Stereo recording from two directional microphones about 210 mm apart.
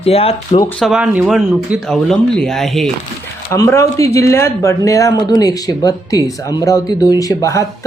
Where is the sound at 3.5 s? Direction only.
15° left (ahead or behind).